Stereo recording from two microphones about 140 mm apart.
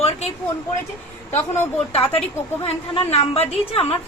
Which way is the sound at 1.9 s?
45° left (ahead or behind).